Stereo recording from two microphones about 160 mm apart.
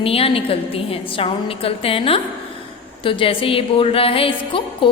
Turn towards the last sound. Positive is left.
turn(degrees=35)  # may be behind; listen again after turning